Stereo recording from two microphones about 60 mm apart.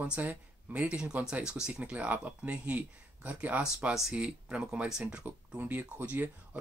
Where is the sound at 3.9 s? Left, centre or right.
Centre.